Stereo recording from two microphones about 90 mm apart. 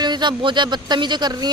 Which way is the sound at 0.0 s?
55° right (ahead or behind).